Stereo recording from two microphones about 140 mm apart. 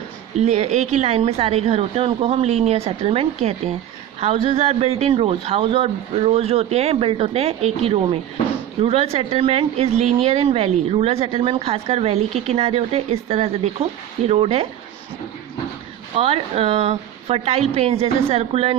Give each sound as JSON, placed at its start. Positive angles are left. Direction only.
{"t": 0.3, "sound": "a man's voice", "side_deg": -55}
{"t": 16.1, "sound": "a man's voice", "side_deg": -45}